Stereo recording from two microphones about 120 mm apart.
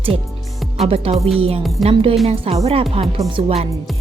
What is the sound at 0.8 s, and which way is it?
Speech, 55° right (ahead or behind).